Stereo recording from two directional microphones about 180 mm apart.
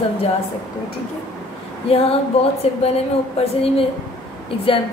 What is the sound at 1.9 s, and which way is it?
A woman's voice, 35° left (ahead or behind).